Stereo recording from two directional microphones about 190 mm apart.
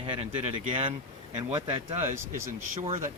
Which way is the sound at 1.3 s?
25° right (ahead or behind).